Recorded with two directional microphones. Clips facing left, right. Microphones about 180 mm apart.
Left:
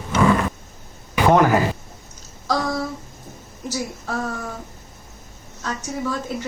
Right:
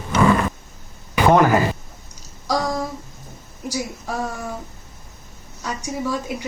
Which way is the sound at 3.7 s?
10° right (ahead or behind).